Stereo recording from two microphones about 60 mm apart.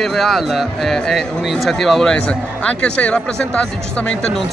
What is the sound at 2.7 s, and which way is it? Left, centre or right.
Speech, left.